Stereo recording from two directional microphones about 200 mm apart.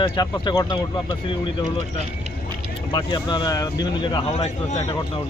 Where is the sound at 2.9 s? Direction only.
20° left (ahead or behind).